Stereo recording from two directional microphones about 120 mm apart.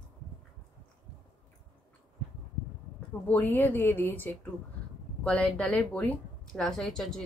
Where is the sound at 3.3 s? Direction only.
15° left (ahead or behind).